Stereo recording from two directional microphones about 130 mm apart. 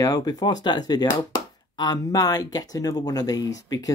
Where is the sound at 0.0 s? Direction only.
30° left (ahead or behind).